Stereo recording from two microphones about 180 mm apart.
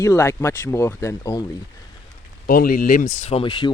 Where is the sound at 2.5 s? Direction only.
55° left (ahead or behind).